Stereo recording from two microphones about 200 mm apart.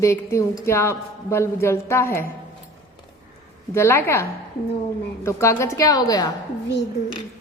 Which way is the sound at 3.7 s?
10° left (ahead or behind).